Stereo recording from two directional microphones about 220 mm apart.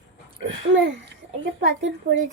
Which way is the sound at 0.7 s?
55° right (ahead or behind).